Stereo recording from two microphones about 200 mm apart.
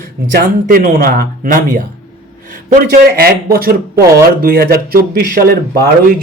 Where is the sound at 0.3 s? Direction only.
45° right (ahead or behind).